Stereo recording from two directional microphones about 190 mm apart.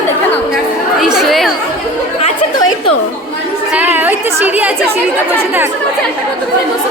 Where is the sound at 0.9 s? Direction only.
Centre (ahead or behind).